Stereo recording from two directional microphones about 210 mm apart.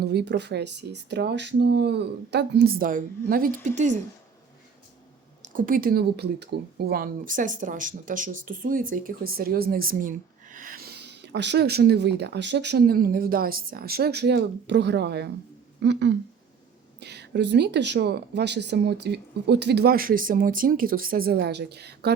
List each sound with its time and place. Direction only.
0.0 s speech: 50° right (ahead or behind)
5.4 s speech: 40° right (ahead or behind)